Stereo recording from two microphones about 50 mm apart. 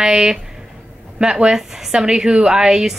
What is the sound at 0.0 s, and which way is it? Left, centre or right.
A woman's voice, centre.